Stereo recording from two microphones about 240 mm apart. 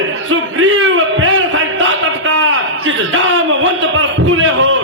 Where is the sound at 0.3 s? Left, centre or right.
Right.